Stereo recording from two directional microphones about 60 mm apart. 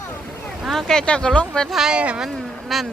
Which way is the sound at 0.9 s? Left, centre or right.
Centre.